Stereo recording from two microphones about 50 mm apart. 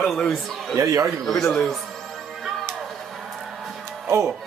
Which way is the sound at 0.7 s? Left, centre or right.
Right.